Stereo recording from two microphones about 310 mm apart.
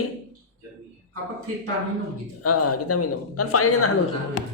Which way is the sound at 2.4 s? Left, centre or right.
Left.